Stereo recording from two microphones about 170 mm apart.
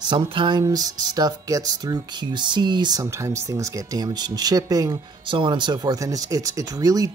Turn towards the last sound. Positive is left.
turn(degrees=-20)  # may be behind; listen again after turning